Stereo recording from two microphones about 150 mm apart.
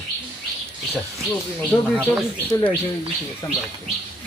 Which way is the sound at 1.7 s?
5° left (ahead or behind).